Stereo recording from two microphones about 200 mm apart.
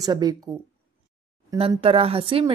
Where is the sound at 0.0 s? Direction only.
20° right (ahead or behind).